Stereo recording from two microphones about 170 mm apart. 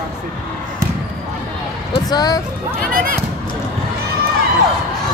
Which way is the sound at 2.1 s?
20° left (ahead or behind).